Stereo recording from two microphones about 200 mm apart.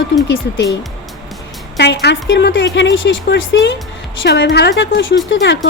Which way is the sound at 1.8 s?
55° left (ahead or behind).